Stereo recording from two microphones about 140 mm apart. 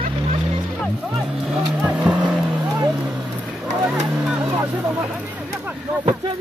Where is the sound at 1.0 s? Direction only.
5° right (ahead or behind).